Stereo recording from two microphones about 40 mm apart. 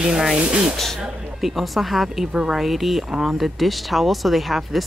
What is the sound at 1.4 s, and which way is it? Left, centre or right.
Speech, centre.